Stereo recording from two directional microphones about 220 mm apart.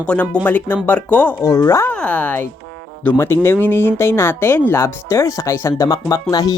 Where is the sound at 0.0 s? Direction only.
5° left (ahead or behind).